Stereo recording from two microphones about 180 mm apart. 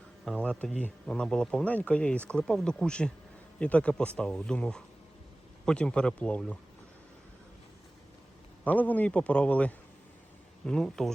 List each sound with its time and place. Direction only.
0.3 s a man's voice: 5° left (ahead or behind)
8.6 s a man's voice: 10° left (ahead or behind)